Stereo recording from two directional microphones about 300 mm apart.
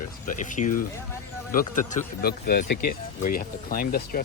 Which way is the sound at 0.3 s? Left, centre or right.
Left.